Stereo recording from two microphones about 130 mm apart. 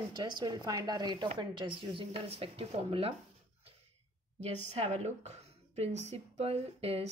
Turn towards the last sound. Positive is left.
turn(degrees=-50)  # may be behind; listen again after turning